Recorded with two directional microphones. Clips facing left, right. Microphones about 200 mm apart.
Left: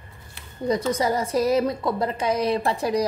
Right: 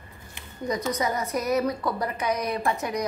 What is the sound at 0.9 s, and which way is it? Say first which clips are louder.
A woman's voice: left 4 dB; 30° left (ahead or behind).